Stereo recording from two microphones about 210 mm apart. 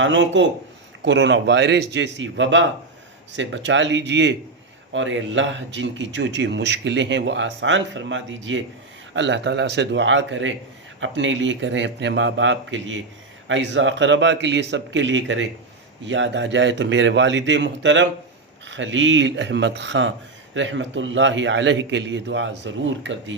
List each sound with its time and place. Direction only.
0.0 s speech: 60° right (ahead or behind)